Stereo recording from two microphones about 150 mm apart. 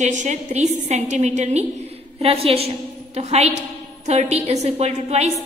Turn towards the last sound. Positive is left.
turn(degrees=-45)  # may be behind; listen again after turning